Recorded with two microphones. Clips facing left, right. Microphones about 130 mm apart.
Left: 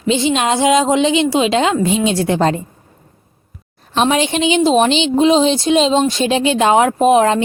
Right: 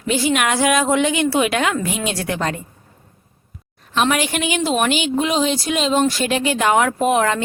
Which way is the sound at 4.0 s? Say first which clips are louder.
Left 4 dB; 25° left (ahead or behind).